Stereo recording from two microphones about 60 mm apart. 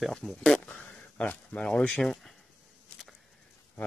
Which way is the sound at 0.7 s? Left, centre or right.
Left.